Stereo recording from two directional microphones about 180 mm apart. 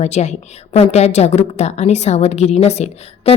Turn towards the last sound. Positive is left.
turn(degrees=35)  # may be behind; listen again after turning